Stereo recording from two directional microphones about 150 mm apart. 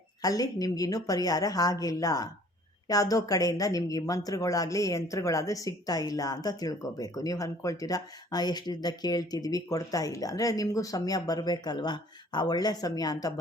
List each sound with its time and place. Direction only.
0.2 s a woman's voice: 25° left (ahead or behind)